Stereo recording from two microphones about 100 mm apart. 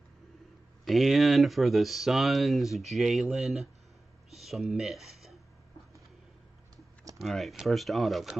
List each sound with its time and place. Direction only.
0.8 s speech: centre (ahead or behind)
7.2 s speech: centre (ahead or behind)